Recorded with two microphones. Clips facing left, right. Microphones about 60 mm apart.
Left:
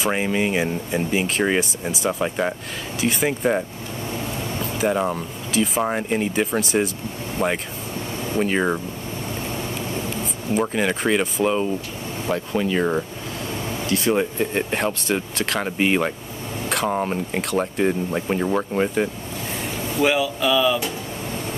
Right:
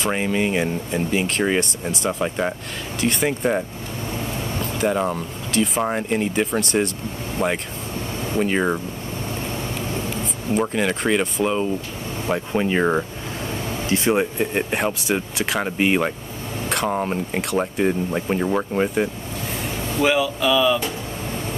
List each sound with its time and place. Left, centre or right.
0.0 s speech: centre
10.5 s speech: centre
12.3 s speech: right
14.1 s speech: centre